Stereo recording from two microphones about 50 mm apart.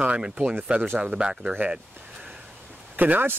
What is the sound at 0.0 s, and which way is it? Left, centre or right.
Speech, right.